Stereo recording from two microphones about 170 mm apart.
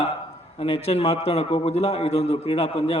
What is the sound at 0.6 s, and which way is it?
A man's voice, 35° left (ahead or behind).